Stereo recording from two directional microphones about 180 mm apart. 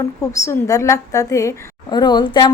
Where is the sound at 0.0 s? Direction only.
15° left (ahead or behind).